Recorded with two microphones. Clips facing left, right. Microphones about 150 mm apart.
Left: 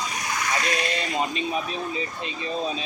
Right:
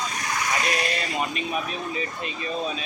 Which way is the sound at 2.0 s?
25° left (ahead or behind).